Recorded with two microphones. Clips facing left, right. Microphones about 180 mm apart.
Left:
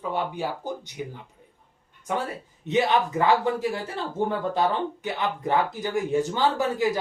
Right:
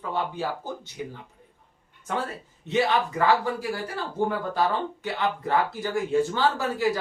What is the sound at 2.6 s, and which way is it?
Speech, 20° left (ahead or behind).